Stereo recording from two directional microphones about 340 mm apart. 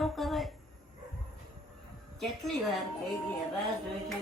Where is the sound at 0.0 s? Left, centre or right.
Centre.